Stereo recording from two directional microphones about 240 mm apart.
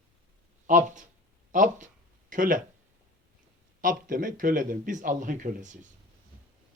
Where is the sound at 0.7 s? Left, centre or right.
Right.